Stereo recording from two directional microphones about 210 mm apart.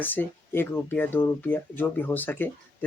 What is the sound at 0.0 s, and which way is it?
Speech, 10° left (ahead or behind).